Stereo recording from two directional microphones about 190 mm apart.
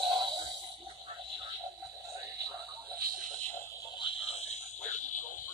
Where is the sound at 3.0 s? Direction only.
45° right (ahead or behind).